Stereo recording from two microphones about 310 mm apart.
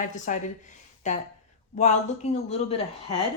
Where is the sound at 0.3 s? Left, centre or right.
Left.